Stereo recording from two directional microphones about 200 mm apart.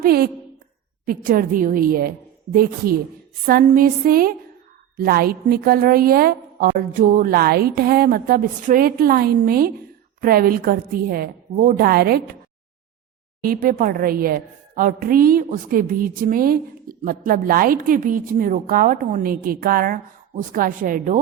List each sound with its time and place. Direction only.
0.0 s a woman's voice: 50° right (ahead or behind)
13.4 s a woman's voice: 45° right (ahead or behind)